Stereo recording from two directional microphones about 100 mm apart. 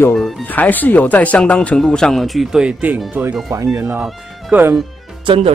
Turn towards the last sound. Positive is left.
turn(degrees=-80)